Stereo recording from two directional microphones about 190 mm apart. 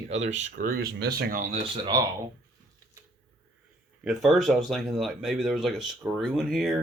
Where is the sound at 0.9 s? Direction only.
60° right (ahead or behind).